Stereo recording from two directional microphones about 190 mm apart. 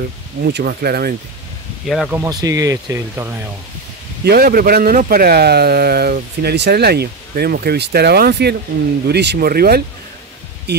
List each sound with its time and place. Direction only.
0.4 s a man's voice: 60° right (ahead or behind)
1.9 s speech: centre (ahead or behind)
2.1 s speech: 20° right (ahead or behind)
4.2 s a man's voice: 55° right (ahead or behind)